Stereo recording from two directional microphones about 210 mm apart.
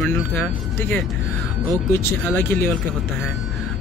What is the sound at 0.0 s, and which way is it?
Speech, 5° left (ahead or behind).